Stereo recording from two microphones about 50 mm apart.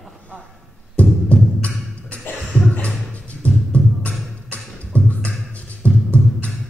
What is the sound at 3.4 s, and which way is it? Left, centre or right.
Music, left.